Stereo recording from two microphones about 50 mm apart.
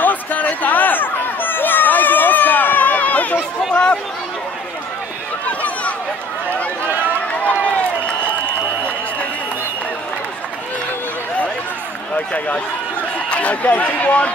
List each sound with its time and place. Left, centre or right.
0.0 s a sound: left
3.7 s chatter: left
13.3 s a man's voice: left